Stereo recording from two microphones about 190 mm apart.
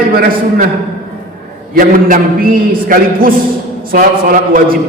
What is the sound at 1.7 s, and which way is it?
A man's voice, 50° right (ahead or behind).